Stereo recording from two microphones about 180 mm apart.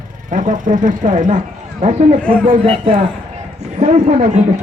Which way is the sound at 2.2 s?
5° left (ahead or behind).